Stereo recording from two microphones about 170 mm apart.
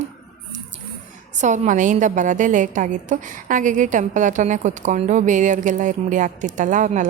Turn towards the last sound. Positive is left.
turn(degrees=-45)  # may be behind; listen again after turning